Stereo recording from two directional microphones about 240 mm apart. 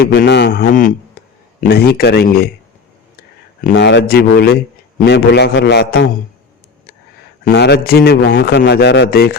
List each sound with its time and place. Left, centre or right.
0.0 s a man's voice: left
3.6 s a man's voice: left
7.4 s a man's voice: left